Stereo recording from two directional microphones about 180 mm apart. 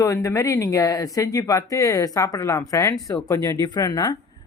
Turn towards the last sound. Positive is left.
turn(degrees=20)  # may be behind; listen again after turning